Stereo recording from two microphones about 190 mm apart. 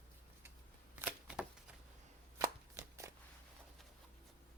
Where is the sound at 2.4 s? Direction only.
15° right (ahead or behind).